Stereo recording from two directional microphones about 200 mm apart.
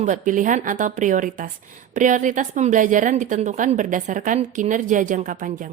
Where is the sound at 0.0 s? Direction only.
40° right (ahead or behind).